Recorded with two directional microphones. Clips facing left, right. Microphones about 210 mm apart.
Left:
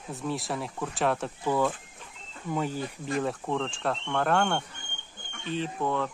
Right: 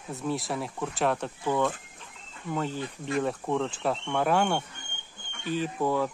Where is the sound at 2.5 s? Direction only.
10° left (ahead or behind).